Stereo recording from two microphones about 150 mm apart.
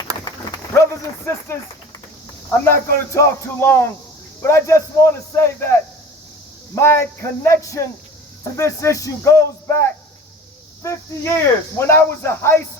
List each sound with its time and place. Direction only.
0.3 s a sound: 20° left (ahead or behind)
2.6 s a man's voice: 15° left (ahead or behind)
10.8 s a man's voice: 20° left (ahead or behind)